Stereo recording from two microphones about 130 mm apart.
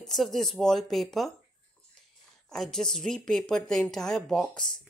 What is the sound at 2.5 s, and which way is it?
Speech, 5° left (ahead or behind).